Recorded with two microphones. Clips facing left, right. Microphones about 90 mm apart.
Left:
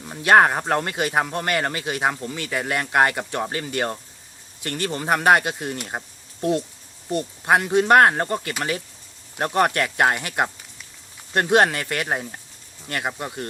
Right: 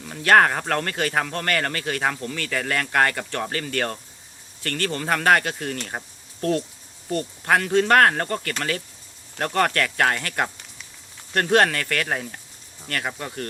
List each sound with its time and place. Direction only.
0.0 s speech: 20° left (ahead or behind)